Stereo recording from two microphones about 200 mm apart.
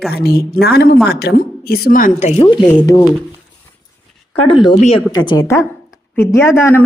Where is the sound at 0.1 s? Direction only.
50° left (ahead or behind); by 3.0 s 20° left (ahead or behind).